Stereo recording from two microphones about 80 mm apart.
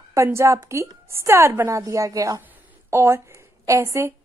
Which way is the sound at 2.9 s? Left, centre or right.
Right.